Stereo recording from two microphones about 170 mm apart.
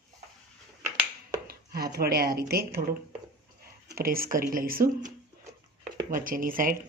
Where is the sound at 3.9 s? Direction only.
60° right (ahead or behind).